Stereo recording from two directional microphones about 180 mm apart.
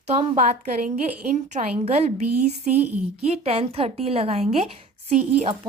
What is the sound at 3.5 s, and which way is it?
A woman's voice, 35° right (ahead or behind).